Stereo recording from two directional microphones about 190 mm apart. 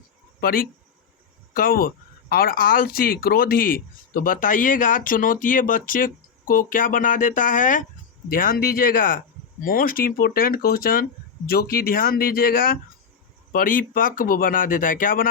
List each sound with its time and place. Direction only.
0.3 s speech: 50° left (ahead or behind)